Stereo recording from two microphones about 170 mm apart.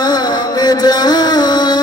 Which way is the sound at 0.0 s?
25° left (ahead or behind).